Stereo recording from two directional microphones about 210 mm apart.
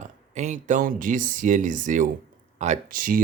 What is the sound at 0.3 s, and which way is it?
Speech, 35° right (ahead or behind).